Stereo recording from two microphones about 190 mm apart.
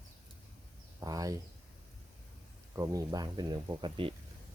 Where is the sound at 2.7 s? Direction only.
15° right (ahead or behind).